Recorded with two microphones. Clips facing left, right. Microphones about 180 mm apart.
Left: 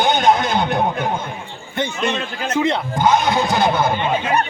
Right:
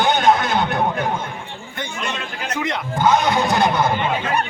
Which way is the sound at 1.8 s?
25° left (ahead or behind).